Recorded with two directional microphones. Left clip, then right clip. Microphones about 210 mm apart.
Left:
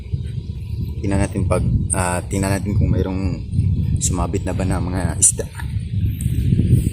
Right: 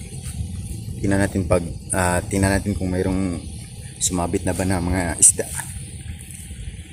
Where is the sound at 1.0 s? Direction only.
10° right (ahead or behind).